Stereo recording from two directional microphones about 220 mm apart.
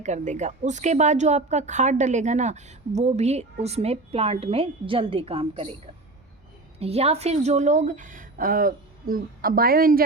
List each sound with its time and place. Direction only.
0.0 s a woman's voice: 30° right (ahead or behind)
6.7 s a woman's voice: 25° right (ahead or behind)